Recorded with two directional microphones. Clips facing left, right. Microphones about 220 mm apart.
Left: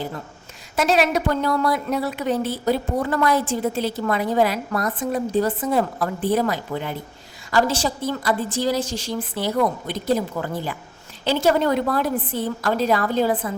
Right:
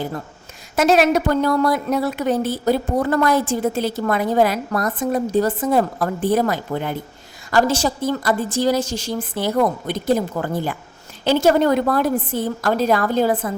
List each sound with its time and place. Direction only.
0.8 s a woman's voice: 45° right (ahead or behind)